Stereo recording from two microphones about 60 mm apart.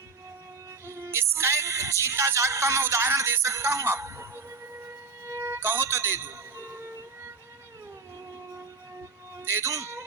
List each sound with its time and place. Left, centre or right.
0.9 s music: right
3.2 s speech: right
5.2 s music: right
9.4 s music: right
9.6 s speech: right